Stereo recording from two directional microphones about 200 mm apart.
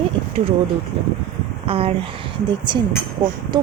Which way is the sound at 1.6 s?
30° right (ahead or behind).